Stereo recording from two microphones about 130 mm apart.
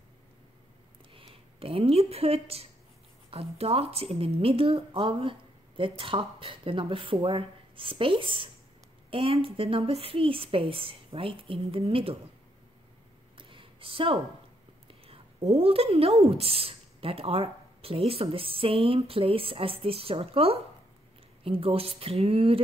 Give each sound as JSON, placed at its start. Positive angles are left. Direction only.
{"t": 1.1, "sound": "a woman's voice", "side_deg": -45}
{"t": 13.4, "sound": "a sound", "side_deg": -40}
{"t": 15.0, "sound": "a woman's voice", "side_deg": -50}